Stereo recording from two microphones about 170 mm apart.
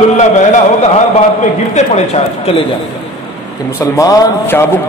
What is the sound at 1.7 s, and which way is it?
Speech, 40° left (ahead or behind).